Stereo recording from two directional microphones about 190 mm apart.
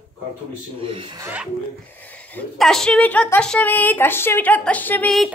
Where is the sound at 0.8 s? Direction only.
30° right (ahead or behind).